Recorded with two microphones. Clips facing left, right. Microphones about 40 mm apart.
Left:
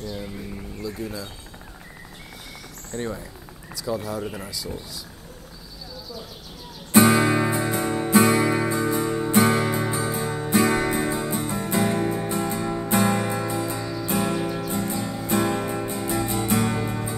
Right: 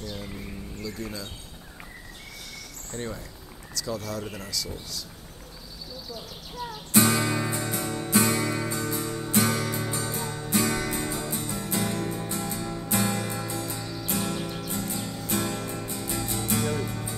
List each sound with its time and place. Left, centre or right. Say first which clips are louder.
0.8 s speech: left 4 dB; centre
2.9 s speech: left 5 dB; centre
6.9 s music: left 6 dB; centre